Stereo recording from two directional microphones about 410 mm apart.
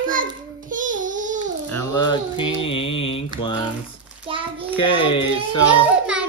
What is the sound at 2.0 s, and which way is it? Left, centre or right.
Mantra, centre.